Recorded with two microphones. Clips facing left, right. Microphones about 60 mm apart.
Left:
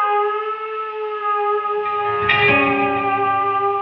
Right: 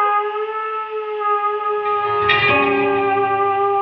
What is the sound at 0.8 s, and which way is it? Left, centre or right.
Civil defense siren, left.